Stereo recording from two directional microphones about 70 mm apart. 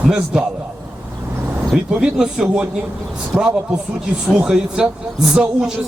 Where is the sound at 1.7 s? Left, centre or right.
Centre.